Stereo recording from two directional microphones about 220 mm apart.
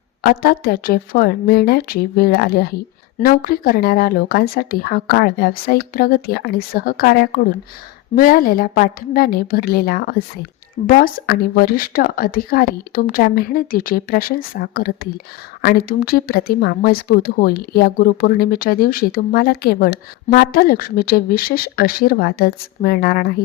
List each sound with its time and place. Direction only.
0.2 s a woman's voice: 45° left (ahead or behind)